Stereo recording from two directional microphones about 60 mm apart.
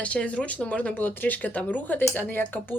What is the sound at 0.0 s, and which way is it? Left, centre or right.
A woman's voice, left.